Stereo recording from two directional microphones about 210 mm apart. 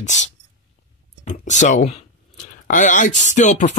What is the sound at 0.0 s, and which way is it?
Speech, 35° left (ahead or behind).